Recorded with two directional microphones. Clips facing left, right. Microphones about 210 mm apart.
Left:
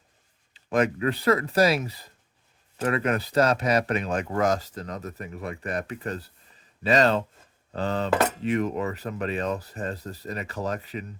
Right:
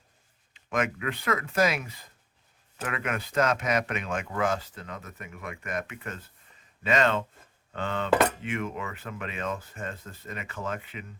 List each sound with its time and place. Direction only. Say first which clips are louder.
0.5 s speech: left 5 dB; 35° left (ahead or behind)